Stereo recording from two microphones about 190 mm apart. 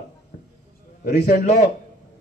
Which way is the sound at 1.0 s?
60° left (ahead or behind).